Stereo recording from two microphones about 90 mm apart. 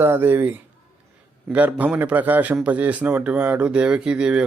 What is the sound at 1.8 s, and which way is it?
Speech, 15° right (ahead or behind).